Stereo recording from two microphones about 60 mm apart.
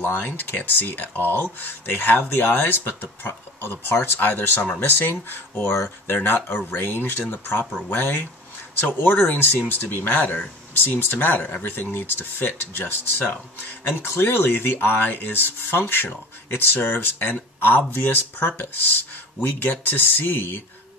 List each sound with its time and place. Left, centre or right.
0.0 s speech: left
10.2 s speech: left
10.8 s speech: left